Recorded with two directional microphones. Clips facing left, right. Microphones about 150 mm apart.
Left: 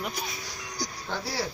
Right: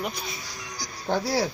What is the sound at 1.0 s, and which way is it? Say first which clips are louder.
Speech: right 9 dB; 50° right (ahead or behind).